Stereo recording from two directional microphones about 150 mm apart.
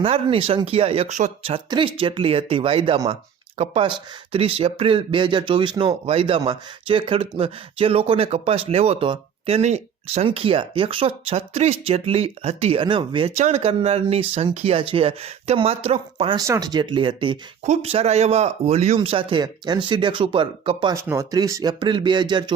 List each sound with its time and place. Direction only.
0.0 s speech: 40° right (ahead or behind)
1.5 s speech: 35° right (ahead or behind)
13.3 s speech: 50° right (ahead or behind)
16.5 s speech: 25° right (ahead or behind)
17.6 s speech: 45° right (ahead or behind)
20.9 s speech: 15° right (ahead or behind)